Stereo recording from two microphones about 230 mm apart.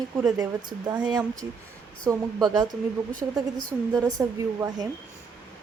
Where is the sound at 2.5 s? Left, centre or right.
Centre.